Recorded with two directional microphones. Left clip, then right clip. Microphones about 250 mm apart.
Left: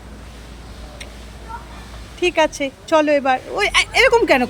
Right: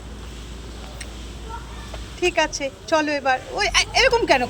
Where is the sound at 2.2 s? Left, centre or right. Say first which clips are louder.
Left 4 dB; centre.